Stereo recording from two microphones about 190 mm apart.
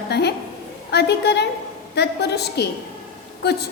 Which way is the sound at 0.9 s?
60° left (ahead or behind).